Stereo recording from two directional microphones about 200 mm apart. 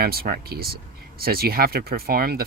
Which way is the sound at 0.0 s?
50° right (ahead or behind).